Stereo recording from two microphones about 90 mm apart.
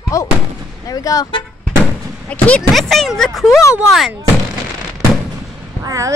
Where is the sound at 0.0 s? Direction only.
35° left (ahead or behind).